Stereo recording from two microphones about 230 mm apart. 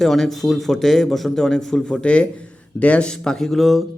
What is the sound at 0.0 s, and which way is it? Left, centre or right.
A man's voice, centre.